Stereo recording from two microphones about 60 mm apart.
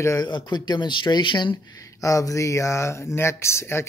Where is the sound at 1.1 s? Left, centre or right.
Left.